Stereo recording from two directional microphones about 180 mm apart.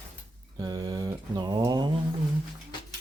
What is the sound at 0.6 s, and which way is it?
Speech, 20° right (ahead or behind).